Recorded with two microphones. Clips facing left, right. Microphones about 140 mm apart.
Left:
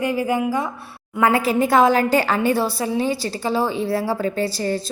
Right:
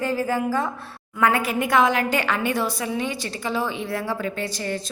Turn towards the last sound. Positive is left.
turn(degrees=35)  # may be behind; listen again after turning